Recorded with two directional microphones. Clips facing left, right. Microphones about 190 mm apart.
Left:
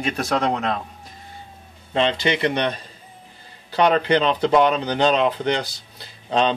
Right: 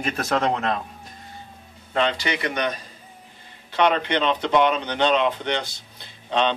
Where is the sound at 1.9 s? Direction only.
25° left (ahead or behind).